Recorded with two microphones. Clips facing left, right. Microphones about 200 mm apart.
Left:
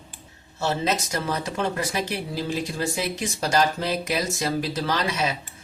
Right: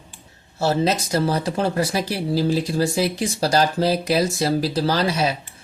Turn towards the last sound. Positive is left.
turn(degrees=-35)  # may be behind; listen again after turning